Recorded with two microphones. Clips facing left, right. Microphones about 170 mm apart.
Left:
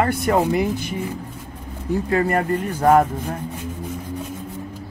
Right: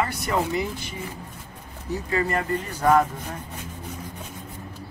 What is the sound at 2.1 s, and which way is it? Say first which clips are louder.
Speech: left 4 dB; 50° left (ahead or behind).